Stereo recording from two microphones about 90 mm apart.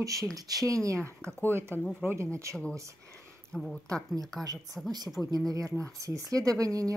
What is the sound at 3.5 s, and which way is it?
Speech, 10° left (ahead or behind).